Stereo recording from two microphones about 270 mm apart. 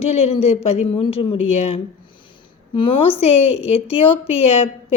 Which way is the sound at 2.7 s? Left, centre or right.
Centre.